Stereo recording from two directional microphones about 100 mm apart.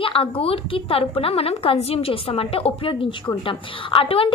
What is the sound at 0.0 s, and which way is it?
A woman's voice, 65° left (ahead or behind).